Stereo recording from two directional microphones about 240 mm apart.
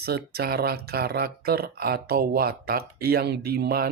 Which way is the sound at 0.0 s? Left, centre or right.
Right.